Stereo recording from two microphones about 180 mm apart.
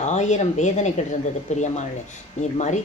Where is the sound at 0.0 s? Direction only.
40° left (ahead or behind).